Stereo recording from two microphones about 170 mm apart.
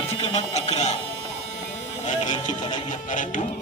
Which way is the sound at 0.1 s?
40° left (ahead or behind).